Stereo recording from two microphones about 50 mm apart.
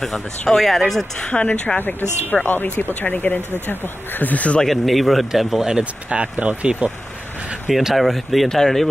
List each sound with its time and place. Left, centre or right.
0.0 s speech: centre
1.3 s a woman's voice: left
1.8 s speech: left
4.6 s speech: centre
6.4 s speech: right
7.7 s speech: centre